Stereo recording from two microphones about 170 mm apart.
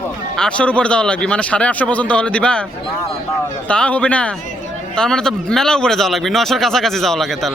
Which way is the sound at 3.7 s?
5° left (ahead or behind).